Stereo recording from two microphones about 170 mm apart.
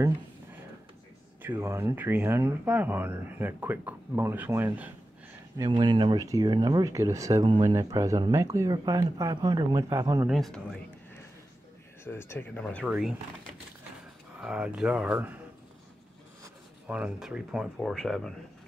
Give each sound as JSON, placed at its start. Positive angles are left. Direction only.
{"t": 1.4, "sound": "speech", "side_deg": -15}
{"t": 5.6, "sound": "speech", "side_deg": -25}
{"t": 10.2, "sound": "speech", "side_deg": 0}
{"t": 12.0, "sound": "speech", "side_deg": 15}
{"t": 12.6, "sound": "speech", "side_deg": 0}
{"t": 14.4, "sound": "speech", "side_deg": -5}
{"t": 16.8, "sound": "speech", "side_deg": -5}